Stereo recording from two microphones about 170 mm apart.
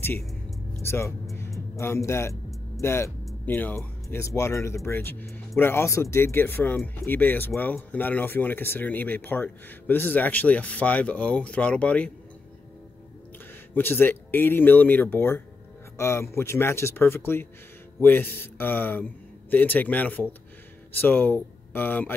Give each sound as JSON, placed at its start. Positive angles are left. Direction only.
{"t": 0.2, "sound": "music", "side_deg": 0}
{"t": 0.8, "sound": "speech", "side_deg": 15}
{"t": 1.3, "sound": "music", "side_deg": 15}
{"t": 2.8, "sound": "speech", "side_deg": 15}
{"t": 13.7, "sound": "speech", "side_deg": 10}